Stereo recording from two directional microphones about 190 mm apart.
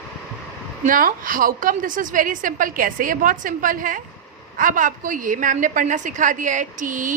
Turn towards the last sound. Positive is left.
turn(degrees=-45)  # may be behind; listen again after turning